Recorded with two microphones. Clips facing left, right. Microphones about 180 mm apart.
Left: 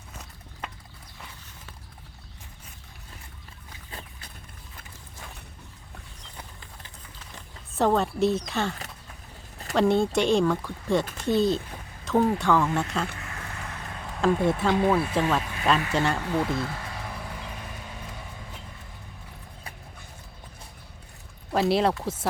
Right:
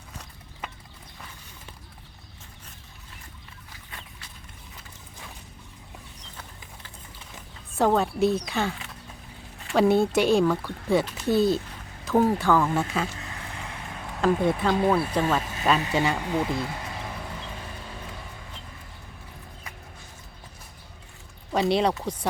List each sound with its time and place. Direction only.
7.3 s a sound: centre (ahead or behind)
8.4 s speech: centre (ahead or behind)
9.7 s speech: 5° right (ahead or behind)
14.2 s speech: centre (ahead or behind)
16.1 s speech: 15° right (ahead or behind)
16.6 s vehicle: 20° right (ahead or behind)
21.5 s speech: centre (ahead or behind)